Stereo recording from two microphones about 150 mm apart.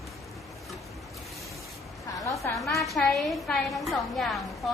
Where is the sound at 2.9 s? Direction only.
Centre (ahead or behind).